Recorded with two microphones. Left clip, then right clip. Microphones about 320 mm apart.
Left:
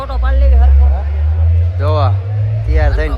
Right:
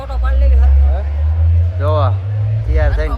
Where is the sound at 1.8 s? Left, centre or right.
Centre.